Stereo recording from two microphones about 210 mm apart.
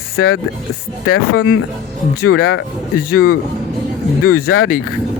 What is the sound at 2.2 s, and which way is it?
Speech, 90° left.